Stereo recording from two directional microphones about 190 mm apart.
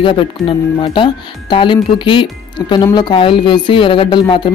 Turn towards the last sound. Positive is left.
turn(degrees=25)  # may be behind; listen again after turning